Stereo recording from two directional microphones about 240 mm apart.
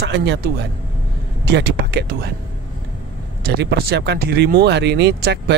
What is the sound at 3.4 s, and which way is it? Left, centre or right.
Speech, right.